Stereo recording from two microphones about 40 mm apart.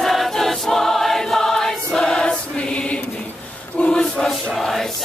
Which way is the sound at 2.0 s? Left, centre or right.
Left.